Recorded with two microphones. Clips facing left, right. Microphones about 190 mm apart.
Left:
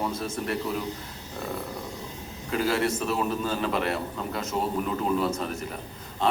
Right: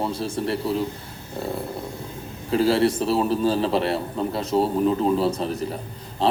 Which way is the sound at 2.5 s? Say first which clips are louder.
Right 6 dB; 30° right (ahead or behind).